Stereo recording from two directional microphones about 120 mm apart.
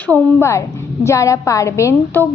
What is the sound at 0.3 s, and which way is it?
A woman's voice, 25° left (ahead or behind).